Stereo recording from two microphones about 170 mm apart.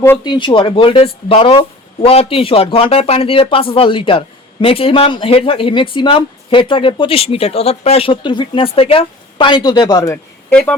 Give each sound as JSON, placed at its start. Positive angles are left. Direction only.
{"t": 0.3, "sound": "speech", "side_deg": 30}